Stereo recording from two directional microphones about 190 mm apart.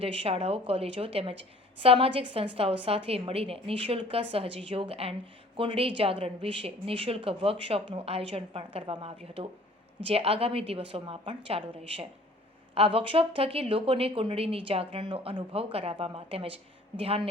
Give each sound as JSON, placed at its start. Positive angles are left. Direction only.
{"t": 0.0, "sound": "speech", "side_deg": -30}